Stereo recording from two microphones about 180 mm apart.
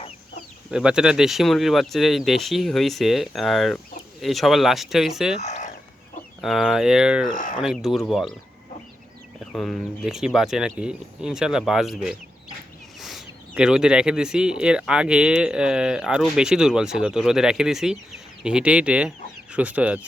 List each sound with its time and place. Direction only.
0.7 s speech: 5° right (ahead or behind)
5.4 s chicken: 40° left (ahead or behind)
6.4 s speech: centre (ahead or behind)
7.3 s speech: 45° left (ahead or behind)
7.6 s speech: centre (ahead or behind)
9.5 s speech: 5° left (ahead or behind)